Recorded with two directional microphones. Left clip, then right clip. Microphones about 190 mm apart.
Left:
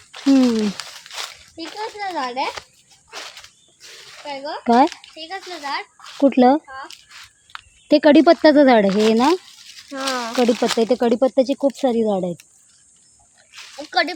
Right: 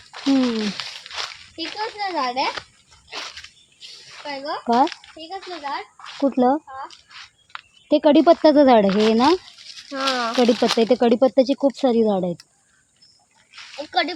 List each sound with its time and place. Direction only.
0.4 s a sound: centre (ahead or behind)
1.8 s speech: 5° left (ahead or behind)
2.1 s a child's voice: 15° left (ahead or behind)
4.2 s speech: centre (ahead or behind)
4.6 s speech: 45° left (ahead or behind)
7.5 s a sound: centre (ahead or behind)
7.9 s speech: 30° left (ahead or behind)
8.9 s speech: centre (ahead or behind)
9.1 s a child's voice: 10° left (ahead or behind)
9.6 s speech: centre (ahead or behind)
13.5 s a sound: centre (ahead or behind)
13.9 s speech: 65° left (ahead or behind)